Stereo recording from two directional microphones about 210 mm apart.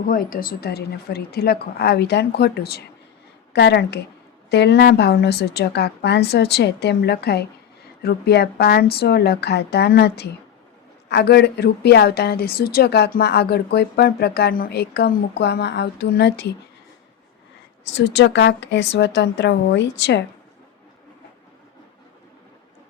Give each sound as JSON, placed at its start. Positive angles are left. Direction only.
{"t": 0.0, "sound": "a woman's voice", "side_deg": 40}
{"t": 17.9, "sound": "a woman's voice", "side_deg": 55}